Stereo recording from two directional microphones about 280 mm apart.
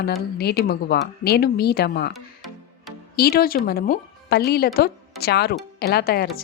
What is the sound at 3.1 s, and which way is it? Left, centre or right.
Speech, left.